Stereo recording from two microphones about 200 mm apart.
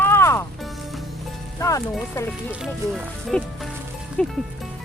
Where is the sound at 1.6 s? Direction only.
15° left (ahead or behind).